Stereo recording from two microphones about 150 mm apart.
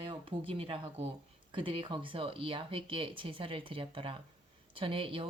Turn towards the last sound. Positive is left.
turn(degrees=-35)  # may be behind; listen again after turning